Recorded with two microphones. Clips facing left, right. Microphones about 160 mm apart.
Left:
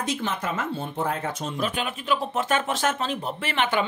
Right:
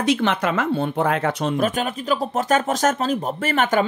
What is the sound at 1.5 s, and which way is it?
Speech, 45° right (ahead or behind).